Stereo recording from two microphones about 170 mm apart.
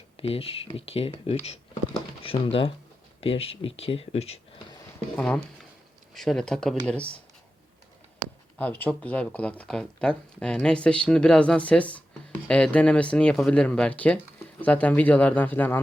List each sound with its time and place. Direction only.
0.2 s speech: 35° left (ahead or behind)
5.1 s speech: 5° left (ahead or behind)
8.5 s speech: 10° left (ahead or behind)